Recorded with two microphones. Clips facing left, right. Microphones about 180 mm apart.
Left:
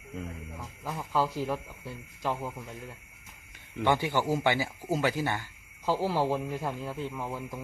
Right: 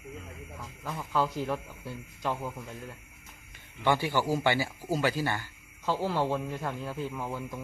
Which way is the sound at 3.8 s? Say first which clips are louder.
Even; 20° left (ahead or behind).